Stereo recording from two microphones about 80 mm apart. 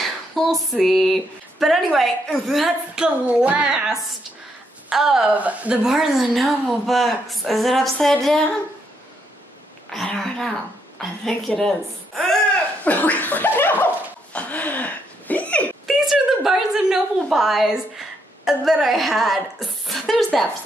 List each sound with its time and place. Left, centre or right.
0.0 s a sound: centre
1.6 s a woman's voice: centre
3.3 s a child's voice: centre
5.3 s a child's voice: centre
5.9 s a woman's voice: centre
9.9 s a woman's voice: centre
12.8 s a sound: centre
14.3 s laughter: centre
15.9 s a sound: centre